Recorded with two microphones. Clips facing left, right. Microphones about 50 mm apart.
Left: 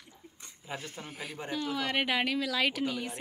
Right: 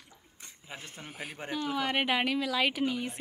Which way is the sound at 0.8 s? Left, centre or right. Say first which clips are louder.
Left 1 dB; centre.